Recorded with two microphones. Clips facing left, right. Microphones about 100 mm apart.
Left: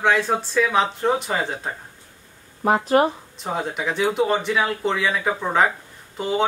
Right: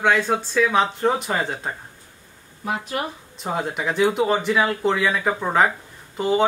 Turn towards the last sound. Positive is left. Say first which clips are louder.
# right 3 dB
turn(degrees=0)  # may be behind; listen again after turning